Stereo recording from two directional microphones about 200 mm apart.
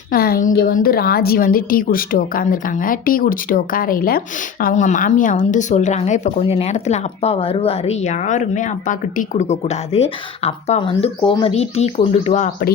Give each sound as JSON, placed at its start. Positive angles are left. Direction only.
{"t": 0.1, "sound": "a woman's voice", "side_deg": 50}